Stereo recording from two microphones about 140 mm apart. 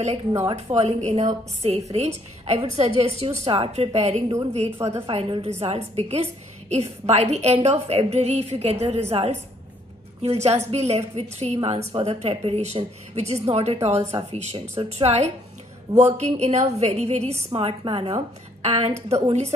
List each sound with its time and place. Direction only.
0.6 s a woman's voice: 50° right (ahead or behind)